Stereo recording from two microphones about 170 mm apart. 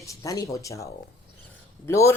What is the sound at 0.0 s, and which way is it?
Speech, 20° left (ahead or behind).